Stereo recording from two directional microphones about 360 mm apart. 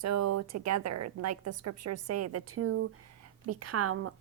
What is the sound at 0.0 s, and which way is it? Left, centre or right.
A woman's voice, right.